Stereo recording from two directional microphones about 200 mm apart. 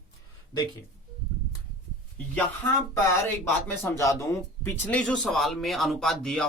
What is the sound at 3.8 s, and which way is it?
Speech, 15° left (ahead or behind).